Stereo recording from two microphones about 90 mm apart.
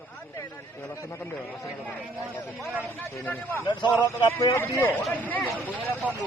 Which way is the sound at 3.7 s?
55° left (ahead or behind).